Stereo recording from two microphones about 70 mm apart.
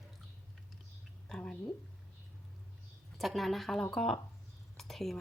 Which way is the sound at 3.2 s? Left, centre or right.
Centre.